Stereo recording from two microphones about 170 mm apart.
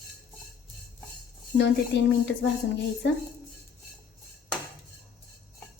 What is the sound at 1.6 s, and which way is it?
Speech, 90° left.